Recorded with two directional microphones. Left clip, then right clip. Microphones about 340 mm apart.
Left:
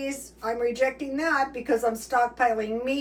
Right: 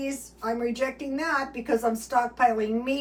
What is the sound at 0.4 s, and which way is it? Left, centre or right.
Speech, centre.